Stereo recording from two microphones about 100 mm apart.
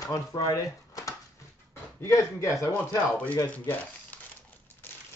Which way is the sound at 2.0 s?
30° left (ahead or behind).